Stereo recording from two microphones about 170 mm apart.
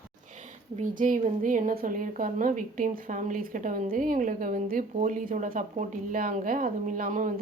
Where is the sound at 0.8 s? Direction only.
50° right (ahead or behind).